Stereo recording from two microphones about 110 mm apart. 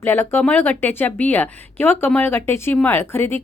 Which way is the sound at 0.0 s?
20° left (ahead or behind).